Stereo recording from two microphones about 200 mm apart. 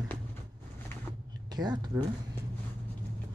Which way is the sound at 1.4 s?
20° right (ahead or behind).